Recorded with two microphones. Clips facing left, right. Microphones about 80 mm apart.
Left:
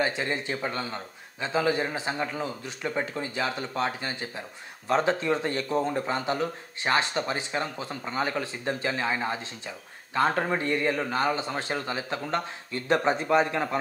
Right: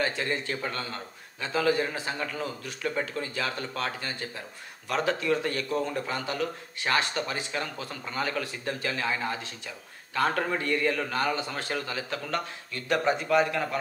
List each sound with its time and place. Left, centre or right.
0.0 s speech: centre